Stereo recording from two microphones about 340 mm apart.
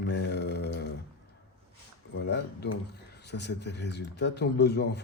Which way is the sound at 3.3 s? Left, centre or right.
Left.